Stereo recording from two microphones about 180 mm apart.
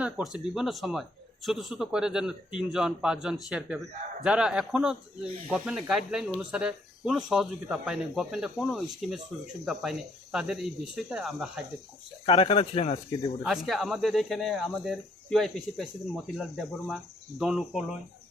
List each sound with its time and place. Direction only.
0.0 s a man's voice: 5° right (ahead or behind)
10.3 s a man's voice: 5° right (ahead or behind)
12.2 s speech: 30° left (ahead or behind)
13.4 s a man's voice: centre (ahead or behind)